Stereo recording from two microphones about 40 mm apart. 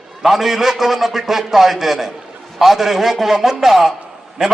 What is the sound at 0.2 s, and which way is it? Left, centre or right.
A man's voice, centre.